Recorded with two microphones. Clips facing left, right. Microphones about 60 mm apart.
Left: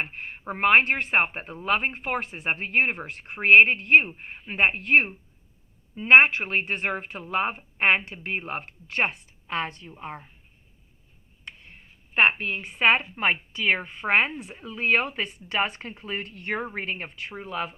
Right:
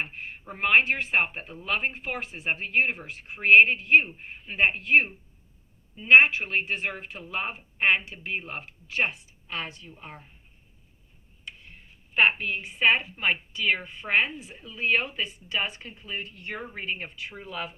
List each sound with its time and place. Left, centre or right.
0.0 s a woman's voice: left
12.1 s a woman's voice: left